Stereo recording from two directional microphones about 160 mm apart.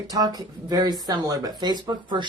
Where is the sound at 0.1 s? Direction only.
25° right (ahead or behind).